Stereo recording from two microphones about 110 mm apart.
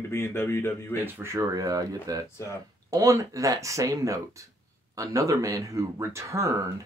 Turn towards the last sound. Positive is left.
turn(degrees=-25)  # may be behind; listen again after turning